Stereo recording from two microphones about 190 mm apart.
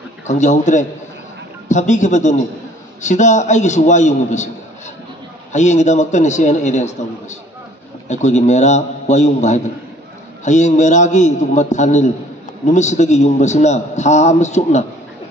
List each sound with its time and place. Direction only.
0.3 s a man's voice: 40° left (ahead or behind)
5.5 s a man's voice: 40° left (ahead or behind)